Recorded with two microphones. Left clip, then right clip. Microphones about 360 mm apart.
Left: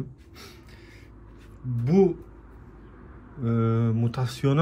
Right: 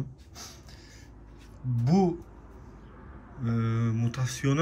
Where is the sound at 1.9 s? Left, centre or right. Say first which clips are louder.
Left 6 dB; right.